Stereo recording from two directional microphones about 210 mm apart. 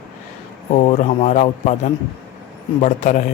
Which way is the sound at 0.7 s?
30° left (ahead or behind).